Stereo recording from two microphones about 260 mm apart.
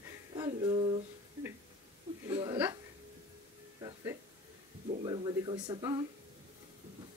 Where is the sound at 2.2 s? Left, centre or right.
Centre.